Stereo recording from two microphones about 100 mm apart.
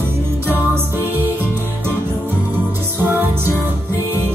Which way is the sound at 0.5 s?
20° right (ahead or behind).